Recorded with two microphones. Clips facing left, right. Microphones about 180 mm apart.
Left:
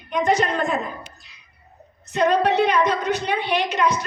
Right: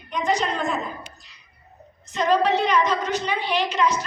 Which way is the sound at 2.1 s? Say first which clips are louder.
Left 2 dB; 60° left (ahead or behind).